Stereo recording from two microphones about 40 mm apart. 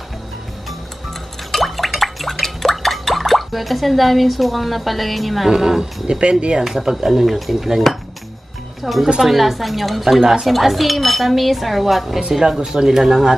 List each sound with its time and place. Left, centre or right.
1.5 s a sound: centre
5.5 s speech: centre
8.8 s speech: centre
12.2 s speech: centre